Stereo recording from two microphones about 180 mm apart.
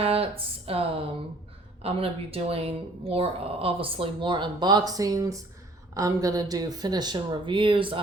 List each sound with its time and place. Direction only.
0.0 s speech: 35° right (ahead or behind)